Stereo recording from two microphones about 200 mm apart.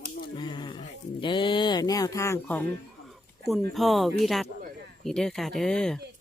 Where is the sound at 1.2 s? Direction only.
25° left (ahead or behind).